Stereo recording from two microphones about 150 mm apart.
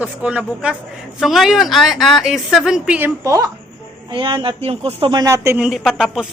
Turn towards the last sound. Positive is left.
turn(degrees=-5)  # may be behind; listen again after turning